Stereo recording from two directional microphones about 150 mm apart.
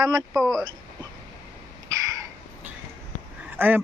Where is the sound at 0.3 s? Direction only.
Centre (ahead or behind).